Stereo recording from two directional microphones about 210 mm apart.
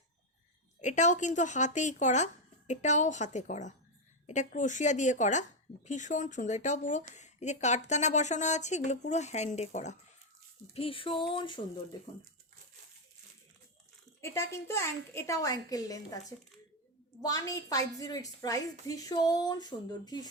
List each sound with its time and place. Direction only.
0.8 s speech: 35° left (ahead or behind)
10.8 s a sound: 25° left (ahead or behind)
14.2 s a woman's voice: 15° left (ahead or behind)
17.2 s a woman's voice: 15° left (ahead or behind)